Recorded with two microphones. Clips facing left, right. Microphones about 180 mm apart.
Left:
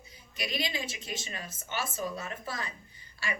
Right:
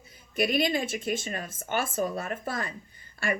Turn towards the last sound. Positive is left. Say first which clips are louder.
# right 7 dB
turn(degrees=-50)  # may be behind; listen again after turning